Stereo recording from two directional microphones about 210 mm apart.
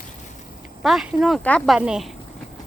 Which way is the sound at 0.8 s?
Centre (ahead or behind).